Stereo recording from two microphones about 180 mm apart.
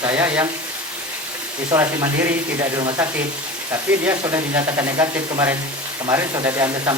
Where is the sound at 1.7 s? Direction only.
25° right (ahead or behind).